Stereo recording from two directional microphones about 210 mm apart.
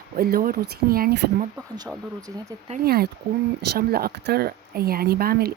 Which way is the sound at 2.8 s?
45° right (ahead or behind).